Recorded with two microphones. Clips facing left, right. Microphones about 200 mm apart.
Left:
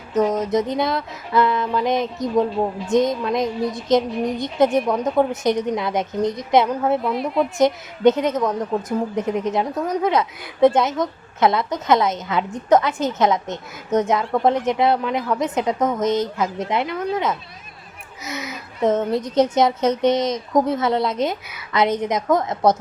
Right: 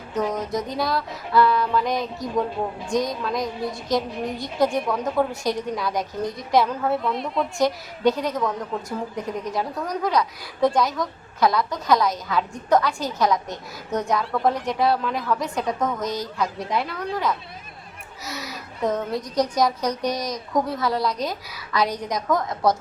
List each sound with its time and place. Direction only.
0.1 s a woman's voice: 20° left (ahead or behind)
7.0 s a woman's voice: centre (ahead or behind)
7.6 s a woman's voice: 20° left (ahead or behind)